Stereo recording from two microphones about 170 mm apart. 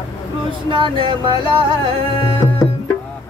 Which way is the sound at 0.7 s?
30° right (ahead or behind).